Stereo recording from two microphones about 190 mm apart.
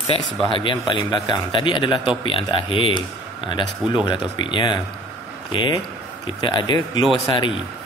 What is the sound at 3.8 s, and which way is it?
Speech, 5° right (ahead or behind).